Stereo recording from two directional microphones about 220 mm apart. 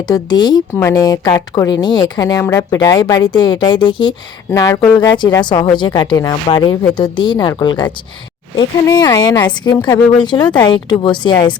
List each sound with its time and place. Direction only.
0.1 s a woman's voice: 20° left (ahead or behind)